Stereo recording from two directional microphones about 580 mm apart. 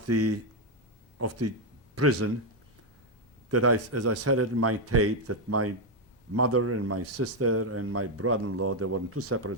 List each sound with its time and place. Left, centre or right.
0.0 s a man's voice: right
3.5 s a man's voice: right